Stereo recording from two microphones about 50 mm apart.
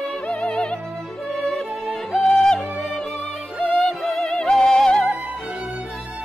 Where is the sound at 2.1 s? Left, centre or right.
Centre.